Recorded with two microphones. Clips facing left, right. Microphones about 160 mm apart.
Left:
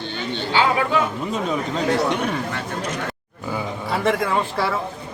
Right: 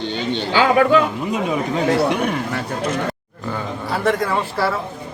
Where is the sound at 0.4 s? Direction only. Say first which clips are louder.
Right 5 dB; 55° right (ahead or behind).